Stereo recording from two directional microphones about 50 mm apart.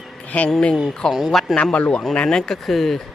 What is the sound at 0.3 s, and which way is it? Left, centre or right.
Speech, left.